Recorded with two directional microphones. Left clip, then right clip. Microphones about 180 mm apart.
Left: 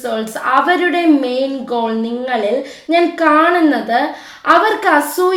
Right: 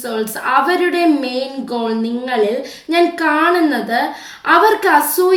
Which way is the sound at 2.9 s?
15° left (ahead or behind).